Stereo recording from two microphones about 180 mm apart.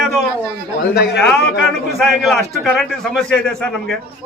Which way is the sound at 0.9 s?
70° left (ahead or behind).